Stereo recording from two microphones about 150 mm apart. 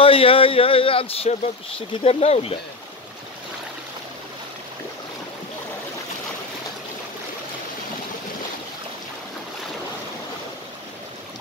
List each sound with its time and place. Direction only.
0.0 s speech: 40° left (ahead or behind)